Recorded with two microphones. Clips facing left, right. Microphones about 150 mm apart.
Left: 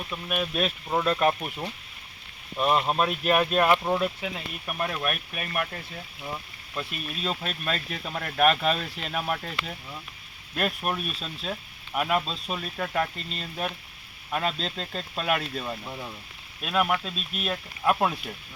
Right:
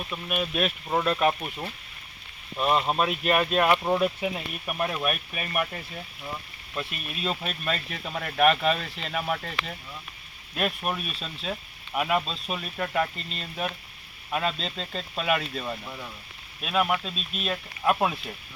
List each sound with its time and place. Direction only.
0.1 s speech: centre (ahead or behind)
15.8 s speech: 20° left (ahead or behind)
16.6 s speech: centre (ahead or behind)